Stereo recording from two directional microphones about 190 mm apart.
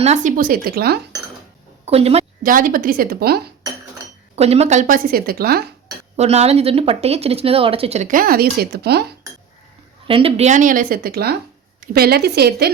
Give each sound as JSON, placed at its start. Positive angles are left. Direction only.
{"t": 0.0, "sound": "a woman's voice", "side_deg": -40}
{"t": 1.8, "sound": "a woman's voice", "side_deg": -30}
{"t": 2.4, "sound": "a woman's voice", "side_deg": -45}
{"t": 4.4, "sound": "a woman's voice", "side_deg": -35}
{"t": 6.1, "sound": "speech", "side_deg": -35}
{"t": 10.1, "sound": "a woman's voice", "side_deg": -30}